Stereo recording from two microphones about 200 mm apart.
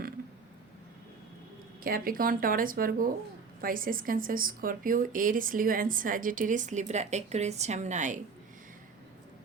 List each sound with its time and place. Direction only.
1.8 s a woman's voice: 45° right (ahead or behind)